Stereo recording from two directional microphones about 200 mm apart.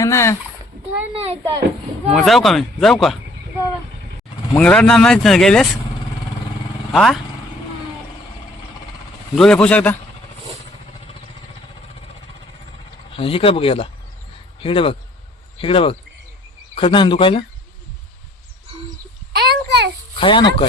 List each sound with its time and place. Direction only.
0.0 s a child's voice: 15° left (ahead or behind)
1.1 s speech: 25° right (ahead or behind)
2.1 s speech: centre (ahead or behind)
4.5 s speech: 5° left (ahead or behind)
6.9 s speech: 5° left (ahead or behind)
9.3 s speech: 5° left (ahead or behind)
13.1 s speech: 25° left (ahead or behind)
19.4 s a child's voice: 55° right (ahead or behind)
20.1 s speech: 25° left (ahead or behind)